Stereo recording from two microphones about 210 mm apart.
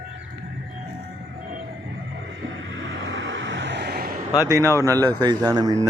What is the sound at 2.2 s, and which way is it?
Vehicle, 60° right (ahead or behind).